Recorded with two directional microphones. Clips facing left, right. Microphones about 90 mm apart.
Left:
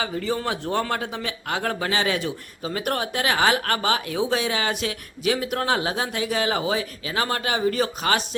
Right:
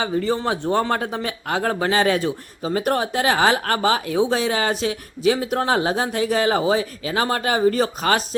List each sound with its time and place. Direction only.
0.3 s a man's voice: 30° right (ahead or behind)